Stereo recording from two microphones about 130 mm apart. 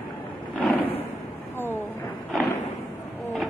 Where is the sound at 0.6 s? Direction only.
15° left (ahead or behind).